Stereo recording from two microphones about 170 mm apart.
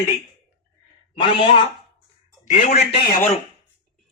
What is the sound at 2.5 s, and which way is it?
Speech, 45° left (ahead or behind).